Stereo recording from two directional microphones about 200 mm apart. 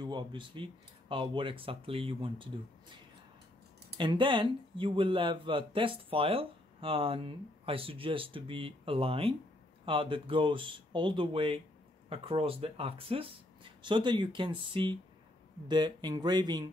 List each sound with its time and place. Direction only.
0.0 s speech: 25° right (ahead or behind)
4.0 s speech: 25° right (ahead or behind)